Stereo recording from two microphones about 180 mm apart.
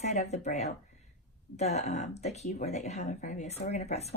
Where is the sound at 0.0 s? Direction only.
40° left (ahead or behind).